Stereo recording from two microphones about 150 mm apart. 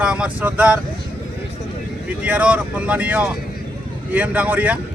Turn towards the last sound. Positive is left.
turn(degrees=-10)  # may be behind; listen again after turning